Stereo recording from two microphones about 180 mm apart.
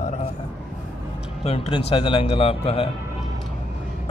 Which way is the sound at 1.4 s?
35° left (ahead or behind).